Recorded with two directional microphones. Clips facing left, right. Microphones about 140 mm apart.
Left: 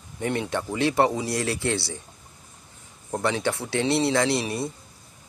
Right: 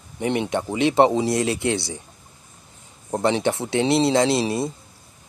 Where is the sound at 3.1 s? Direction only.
20° right (ahead or behind).